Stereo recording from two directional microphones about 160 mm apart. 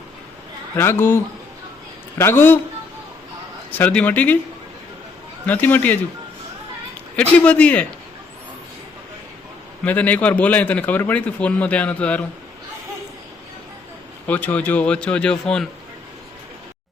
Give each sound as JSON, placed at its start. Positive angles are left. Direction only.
{"t": 0.8, "sound": "a man's voice", "side_deg": 15}
{"t": 3.7, "sound": "a man's voice", "side_deg": 10}
{"t": 5.5, "sound": "a man's voice", "side_deg": 10}
{"t": 7.3, "sound": "a man's voice", "side_deg": 10}
{"t": 9.8, "sound": "a man's voice", "side_deg": 10}
{"t": 14.3, "sound": "a man's voice", "side_deg": 10}